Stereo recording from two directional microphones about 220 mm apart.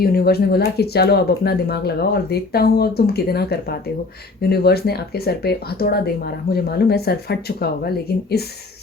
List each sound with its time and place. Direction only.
0.0 s speech: 45° left (ahead or behind)